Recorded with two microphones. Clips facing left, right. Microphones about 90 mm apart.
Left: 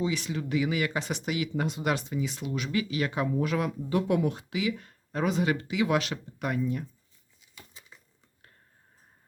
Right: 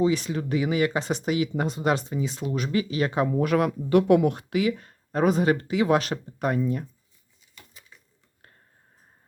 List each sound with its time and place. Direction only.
0.0 s speech: 40° right (ahead or behind)
3.3 s speech: 55° right (ahead or behind); by 6.6 s 40° right (ahead or behind)
7.7 s a sound: 20° left (ahead or behind)